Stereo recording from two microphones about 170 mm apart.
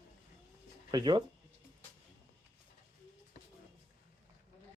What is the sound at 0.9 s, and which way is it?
Speech, 25° right (ahead or behind).